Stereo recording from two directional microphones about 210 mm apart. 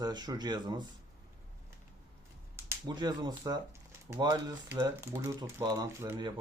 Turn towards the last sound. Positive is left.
turn(degrees=-15)  # may be behind; listen again after turning